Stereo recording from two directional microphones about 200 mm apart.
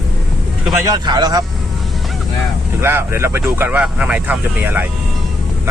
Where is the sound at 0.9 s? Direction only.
20° right (ahead or behind).